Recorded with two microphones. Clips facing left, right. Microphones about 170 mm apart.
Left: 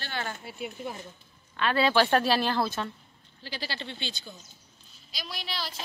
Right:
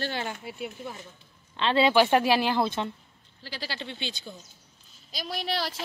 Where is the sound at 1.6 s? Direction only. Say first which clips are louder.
Right 2 dB; 25° right (ahead or behind).